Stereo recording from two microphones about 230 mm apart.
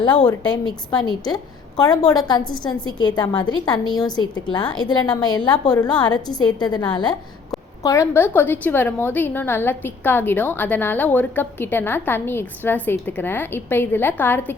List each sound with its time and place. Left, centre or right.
0.0 s a woman's voice: centre